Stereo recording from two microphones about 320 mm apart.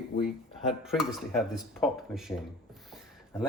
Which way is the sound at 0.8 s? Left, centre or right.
Centre.